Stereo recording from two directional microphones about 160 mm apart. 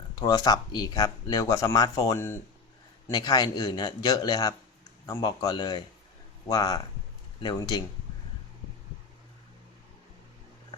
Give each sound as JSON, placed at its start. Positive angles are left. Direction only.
{"t": 0.2, "sound": "speech", "side_deg": 25}